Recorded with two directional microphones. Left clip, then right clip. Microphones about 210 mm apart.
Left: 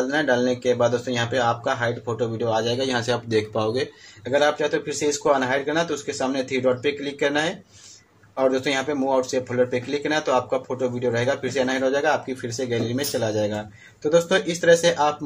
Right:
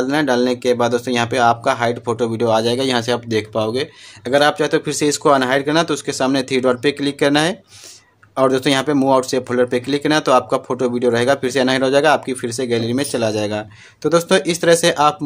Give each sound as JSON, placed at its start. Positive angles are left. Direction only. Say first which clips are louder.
{"t": 0.1, "sound": "speech", "louder": "right 5 dB", "side_deg": -35}
{"t": 4.2, "sound": "speech", "louder": "right 5 dB", "side_deg": -40}